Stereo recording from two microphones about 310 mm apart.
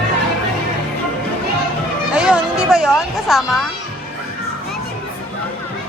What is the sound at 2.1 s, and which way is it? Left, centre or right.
Music, centre.